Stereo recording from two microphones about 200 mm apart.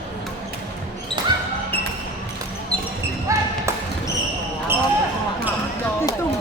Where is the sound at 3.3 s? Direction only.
15° right (ahead or behind).